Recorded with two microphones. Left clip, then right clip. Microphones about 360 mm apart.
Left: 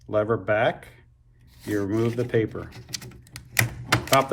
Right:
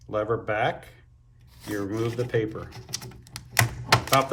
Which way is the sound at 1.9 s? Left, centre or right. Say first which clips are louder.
Left 2 dB; centre.